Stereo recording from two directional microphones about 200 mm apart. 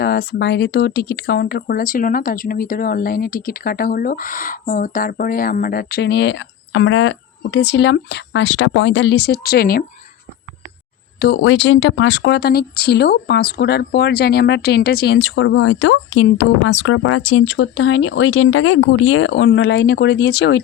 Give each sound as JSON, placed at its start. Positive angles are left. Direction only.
{"t": 0.0, "sound": "speech", "side_deg": 50}
{"t": 11.2, "sound": "speech", "side_deg": 60}